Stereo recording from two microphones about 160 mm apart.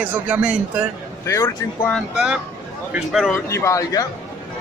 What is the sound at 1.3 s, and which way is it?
Speech, 15° left (ahead or behind).